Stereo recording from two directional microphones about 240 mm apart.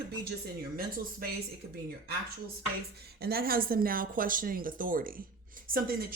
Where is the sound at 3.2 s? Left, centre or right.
Right.